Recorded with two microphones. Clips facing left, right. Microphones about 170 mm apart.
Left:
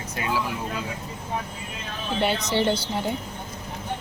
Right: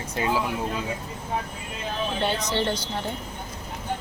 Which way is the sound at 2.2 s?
10° left (ahead or behind).